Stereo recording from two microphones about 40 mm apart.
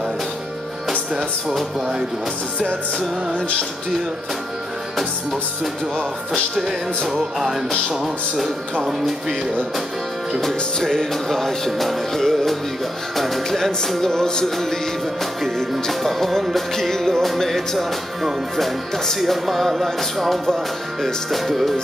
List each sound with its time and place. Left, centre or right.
0.8 s music: centre
3.3 s music: left
7.1 s speech: centre
10.4 s music: centre
13.2 s speech: centre
13.7 s music: centre
15.7 s speech: centre
21.0 s music: centre